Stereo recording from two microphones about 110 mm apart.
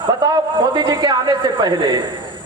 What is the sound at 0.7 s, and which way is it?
A man's voice, 40° right (ahead or behind).